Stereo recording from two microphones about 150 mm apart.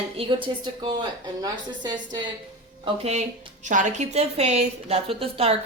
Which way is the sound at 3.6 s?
55° right (ahead or behind).